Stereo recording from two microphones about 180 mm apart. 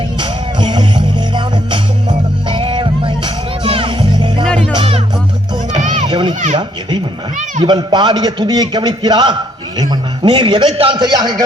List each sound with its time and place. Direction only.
0.2 s music: 25° right (ahead or behind)
4.4 s music: 5° left (ahead or behind)
4.7 s music: 30° right (ahead or behind)
5.9 s children playing: 25° right (ahead or behind)
7.6 s a man's voice: 25° right (ahead or behind)